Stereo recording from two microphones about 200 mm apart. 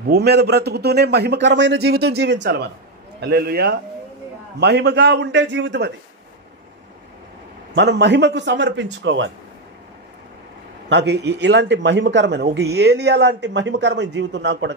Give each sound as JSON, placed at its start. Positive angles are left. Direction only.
{"t": 0.1, "sound": "a man's voice", "side_deg": -55}
{"t": 7.7, "sound": "a man's voice", "side_deg": -60}
{"t": 10.9, "sound": "a man's voice", "side_deg": -60}